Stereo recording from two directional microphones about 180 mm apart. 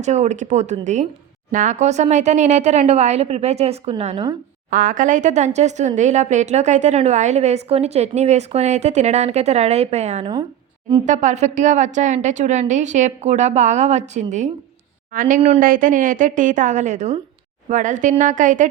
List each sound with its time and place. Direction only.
0.0 s a woman's voice: 40° right (ahead or behind)
4.7 s a woman's voice: 50° right (ahead or behind)
15.4 s a woman's voice: 35° right (ahead or behind)
15.6 s a woman's voice: 50° right (ahead or behind)